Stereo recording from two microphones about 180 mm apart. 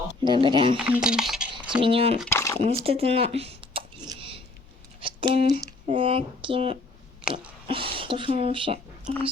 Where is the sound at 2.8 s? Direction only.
35° right (ahead or behind).